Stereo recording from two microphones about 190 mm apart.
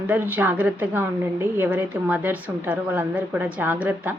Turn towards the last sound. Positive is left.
turn(degrees=-10)  # may be behind; listen again after turning